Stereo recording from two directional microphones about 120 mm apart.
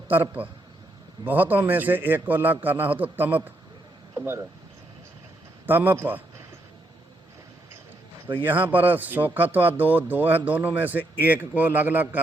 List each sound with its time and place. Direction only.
0.1 s speech: 15° right (ahead or behind)
5.6 s speech: 15° right (ahead or behind)
8.4 s speech: 15° right (ahead or behind)